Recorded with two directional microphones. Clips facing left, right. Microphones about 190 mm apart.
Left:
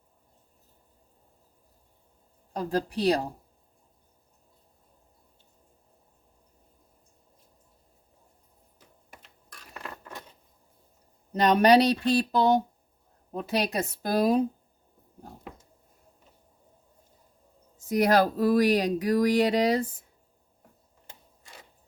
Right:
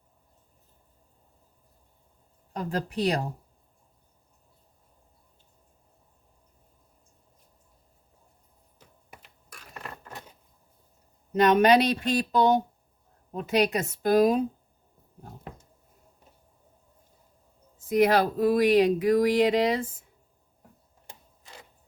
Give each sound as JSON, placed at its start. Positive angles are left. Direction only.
{"t": 2.6, "sound": "speech", "side_deg": 35}
{"t": 11.6, "sound": "speech", "side_deg": 35}
{"t": 17.8, "sound": "speech", "side_deg": 40}